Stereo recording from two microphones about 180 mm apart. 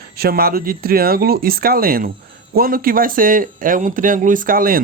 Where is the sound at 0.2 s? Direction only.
60° right (ahead or behind).